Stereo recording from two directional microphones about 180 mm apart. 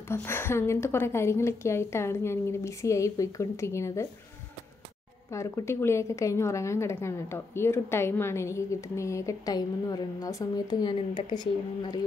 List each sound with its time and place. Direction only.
0.1 s a woman's voice: 15° left (ahead or behind)
5.3 s a woman's voice: 15° left (ahead or behind)